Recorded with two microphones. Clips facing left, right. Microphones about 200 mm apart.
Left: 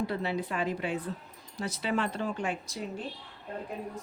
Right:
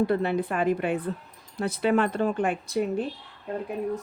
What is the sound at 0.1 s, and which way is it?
Speech, 55° right (ahead or behind).